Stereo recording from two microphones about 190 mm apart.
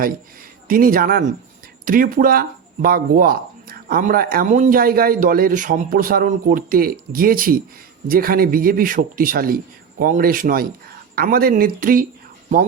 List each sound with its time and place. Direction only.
0.7 s speech: 50° right (ahead or behind)